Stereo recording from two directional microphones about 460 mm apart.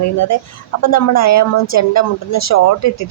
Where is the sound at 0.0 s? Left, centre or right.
Left.